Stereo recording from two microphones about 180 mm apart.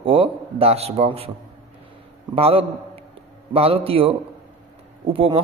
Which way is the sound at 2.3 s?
35° right (ahead or behind).